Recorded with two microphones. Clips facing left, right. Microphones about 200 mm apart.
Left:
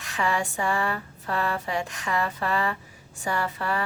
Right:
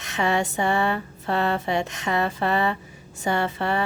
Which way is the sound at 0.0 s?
25° right (ahead or behind).